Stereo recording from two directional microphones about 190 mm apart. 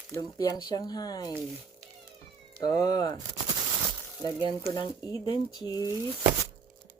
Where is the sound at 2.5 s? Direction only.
20° left (ahead or behind).